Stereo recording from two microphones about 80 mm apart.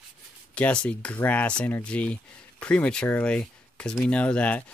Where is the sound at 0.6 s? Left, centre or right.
Centre.